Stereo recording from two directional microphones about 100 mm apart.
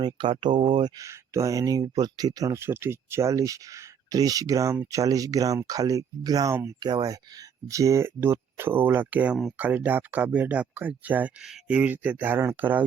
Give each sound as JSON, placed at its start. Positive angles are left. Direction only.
{"t": 0.0, "sound": "speech", "side_deg": -55}
{"t": 6.7, "sound": "speech", "side_deg": -45}